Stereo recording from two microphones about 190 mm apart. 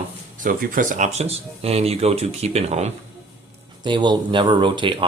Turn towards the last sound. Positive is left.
turn(degrees=-25)  # may be behind; listen again after turning